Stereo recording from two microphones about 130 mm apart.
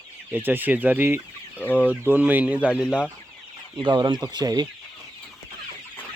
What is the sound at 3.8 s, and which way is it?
Speech, 35° right (ahead or behind).